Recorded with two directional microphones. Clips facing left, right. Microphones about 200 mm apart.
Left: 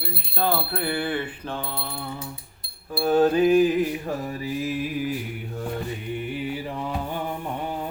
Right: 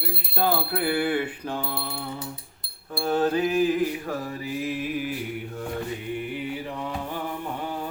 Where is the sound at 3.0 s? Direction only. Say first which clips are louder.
Left 5 dB; 15° left (ahead or behind).